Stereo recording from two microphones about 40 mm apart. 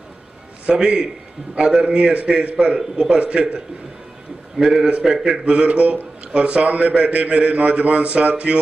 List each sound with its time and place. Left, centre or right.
0.7 s a man's voice: right
4.6 s a man's voice: centre
5.4 s a man's voice: right